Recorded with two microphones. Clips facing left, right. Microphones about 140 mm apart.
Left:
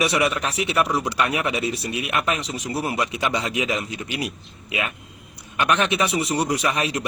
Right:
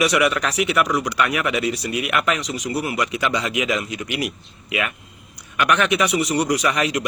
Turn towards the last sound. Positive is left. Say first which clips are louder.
# right 3 dB
turn(degrees=30)  # may be behind; listen again after turning